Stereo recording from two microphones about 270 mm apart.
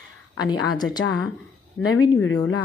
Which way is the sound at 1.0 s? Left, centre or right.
Left.